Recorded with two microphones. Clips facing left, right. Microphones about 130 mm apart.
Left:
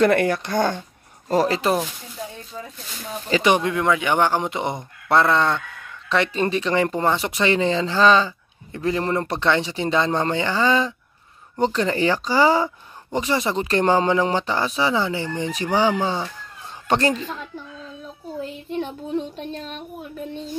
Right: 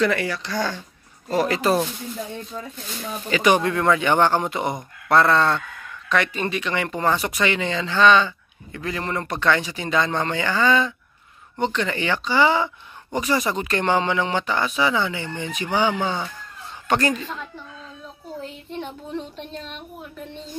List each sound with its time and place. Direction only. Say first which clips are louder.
0.0 s speech: left 5 dB; 50° left (ahead or behind)
1.3 s speech: left 2 dB; 35° left (ahead or behind)
3.3 s speech: even; 30° left (ahead or behind)
3.5 s speech: right 1 dB; 15° left (ahead or behind)
6.0 s a man's voice: left 2 dB; 30° left (ahead or behind)
13.2 s speech: even; 25° left (ahead or behind)
19.3 s speech: left 3 dB; 45° left (ahead or behind)